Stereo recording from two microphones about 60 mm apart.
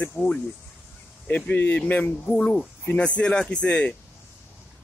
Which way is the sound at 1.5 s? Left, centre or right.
Left.